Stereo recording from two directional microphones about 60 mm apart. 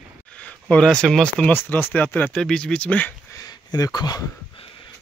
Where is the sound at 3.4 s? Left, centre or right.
Left.